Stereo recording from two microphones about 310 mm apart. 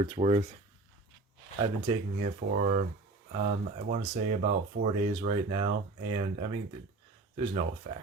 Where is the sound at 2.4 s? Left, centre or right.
Right.